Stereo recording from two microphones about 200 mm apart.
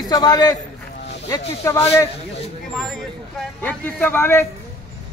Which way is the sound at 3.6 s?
10° left (ahead or behind).